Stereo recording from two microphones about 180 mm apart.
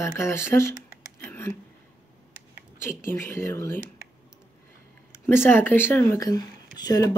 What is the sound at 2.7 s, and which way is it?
Speech, 15° left (ahead or behind).